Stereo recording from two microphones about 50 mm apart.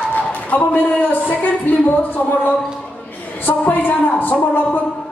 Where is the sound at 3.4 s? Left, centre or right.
Left.